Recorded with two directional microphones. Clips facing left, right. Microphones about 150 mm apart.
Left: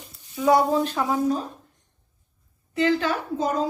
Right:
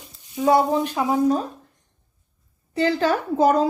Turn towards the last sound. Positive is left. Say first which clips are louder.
# right 7 dB
turn(degrees=-65)  # may be behind; listen again after turning